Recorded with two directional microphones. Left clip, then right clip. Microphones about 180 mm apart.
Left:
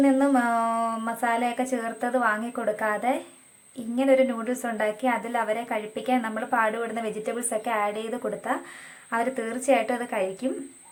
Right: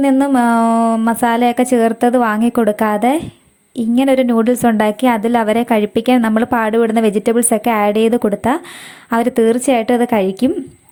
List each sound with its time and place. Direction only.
0.0 s a woman's voice: 40° right (ahead or behind)